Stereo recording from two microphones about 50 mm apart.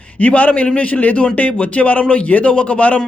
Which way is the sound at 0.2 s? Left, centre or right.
Left.